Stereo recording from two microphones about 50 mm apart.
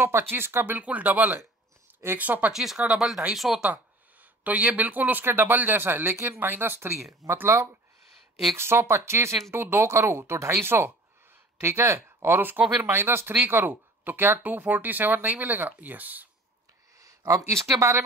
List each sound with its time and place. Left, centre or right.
0.0 s speech: right
0.7 s speech: right
2.5 s speech: centre
3.6 s speech: right
7.4 s speech: right
12.9 s speech: right
14.4 s speech: right
17.0 s a sound: right
17.7 s speech: right